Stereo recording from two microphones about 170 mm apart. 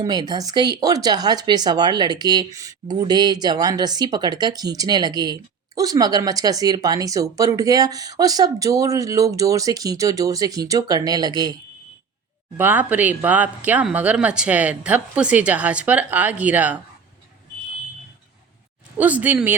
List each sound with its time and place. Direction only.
0.0 s speech: 25° right (ahead or behind)
12.5 s speech: 10° right (ahead or behind)
18.9 s speech: 10° right (ahead or behind)